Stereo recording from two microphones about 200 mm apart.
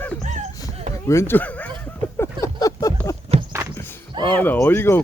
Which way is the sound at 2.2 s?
15° left (ahead or behind).